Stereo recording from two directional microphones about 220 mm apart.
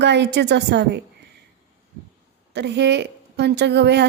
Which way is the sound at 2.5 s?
50° right (ahead or behind).